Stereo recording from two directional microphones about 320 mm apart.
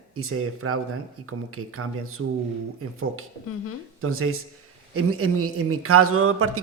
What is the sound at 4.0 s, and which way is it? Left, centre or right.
Speech, right.